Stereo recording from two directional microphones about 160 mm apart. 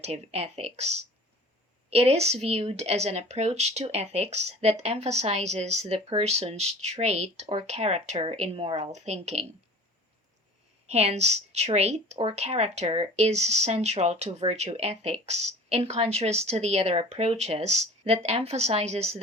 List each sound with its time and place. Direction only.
0.0 s a woman's voice: 40° right (ahead or behind)
10.8 s speech: 40° right (ahead or behind)